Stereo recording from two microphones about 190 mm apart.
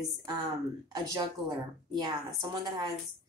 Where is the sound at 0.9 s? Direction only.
20° right (ahead or behind).